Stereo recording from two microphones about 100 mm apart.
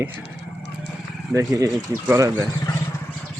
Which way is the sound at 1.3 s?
30° right (ahead or behind).